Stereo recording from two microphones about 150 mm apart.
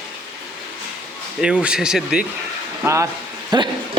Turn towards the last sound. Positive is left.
turn(degrees=-30)  # may be behind; listen again after turning